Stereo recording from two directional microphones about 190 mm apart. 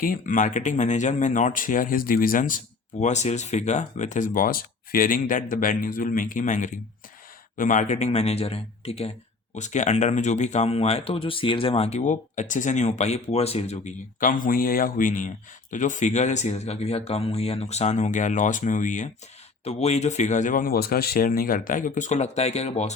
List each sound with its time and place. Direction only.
0.0 s speech: 45° left (ahead or behind)